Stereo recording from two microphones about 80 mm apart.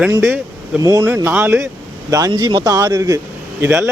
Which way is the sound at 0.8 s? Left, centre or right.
Right.